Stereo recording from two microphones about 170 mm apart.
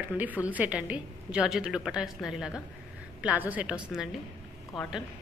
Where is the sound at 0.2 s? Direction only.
10° right (ahead or behind).